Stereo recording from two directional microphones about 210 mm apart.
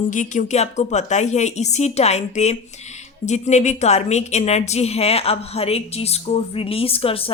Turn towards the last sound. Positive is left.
turn(degrees=25)  # may be behind; listen again after turning